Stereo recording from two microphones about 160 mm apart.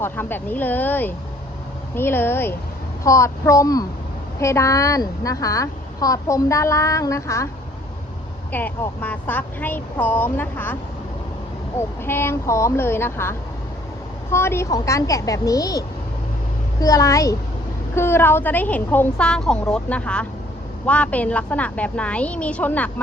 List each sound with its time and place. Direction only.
0.0 s a woman's voice: 10° left (ahead or behind)
8.5 s speech: 10° left (ahead or behind)
11.8 s a woman's voice: 15° left (ahead or behind)
16.8 s a woman's voice: 20° left (ahead or behind)